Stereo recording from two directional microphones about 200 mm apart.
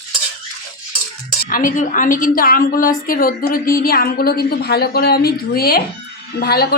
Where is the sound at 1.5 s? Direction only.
45° left (ahead or behind).